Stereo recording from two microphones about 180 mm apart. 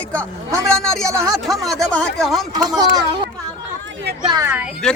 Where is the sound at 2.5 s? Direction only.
20° right (ahead or behind).